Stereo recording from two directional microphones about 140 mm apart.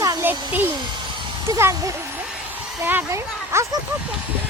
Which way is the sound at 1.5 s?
20° right (ahead or behind).